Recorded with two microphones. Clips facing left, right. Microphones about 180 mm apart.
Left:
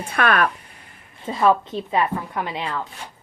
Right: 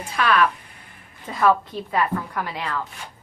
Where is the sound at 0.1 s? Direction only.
55° left (ahead or behind).